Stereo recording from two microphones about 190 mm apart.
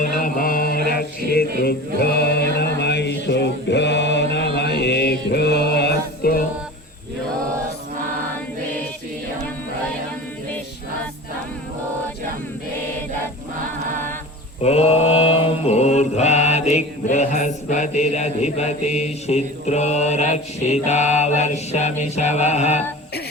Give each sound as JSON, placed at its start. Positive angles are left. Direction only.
{"t": 0.0, "sound": "music", "side_deg": 45}
{"t": 4.5, "sound": "mantra", "side_deg": 60}
{"t": 14.6, "sound": "mantra", "side_deg": 35}